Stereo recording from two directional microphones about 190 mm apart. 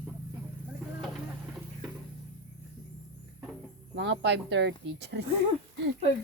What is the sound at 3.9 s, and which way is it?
Speech, 70° right (ahead or behind).